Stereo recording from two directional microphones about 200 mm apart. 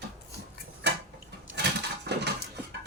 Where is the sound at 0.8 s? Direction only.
60° right (ahead or behind).